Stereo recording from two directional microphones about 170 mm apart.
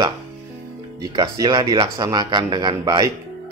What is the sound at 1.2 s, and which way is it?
A man's voice, 25° right (ahead or behind).